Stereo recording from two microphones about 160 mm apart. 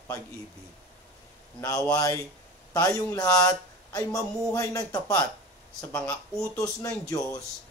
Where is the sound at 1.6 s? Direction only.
20° left (ahead or behind).